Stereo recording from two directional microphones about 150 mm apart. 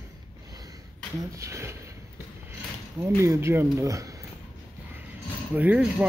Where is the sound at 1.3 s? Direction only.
20° right (ahead or behind).